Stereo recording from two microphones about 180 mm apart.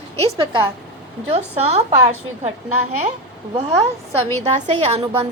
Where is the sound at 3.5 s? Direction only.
35° right (ahead or behind).